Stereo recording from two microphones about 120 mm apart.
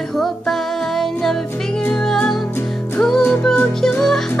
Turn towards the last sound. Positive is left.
turn(degrees=5)  # may be behind; listen again after turning